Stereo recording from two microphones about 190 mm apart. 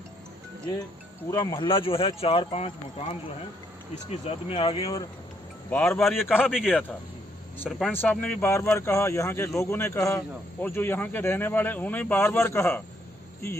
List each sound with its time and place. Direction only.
1.3 s speech: 20° left (ahead or behind)
5.7 s speech: 5° left (ahead or behind)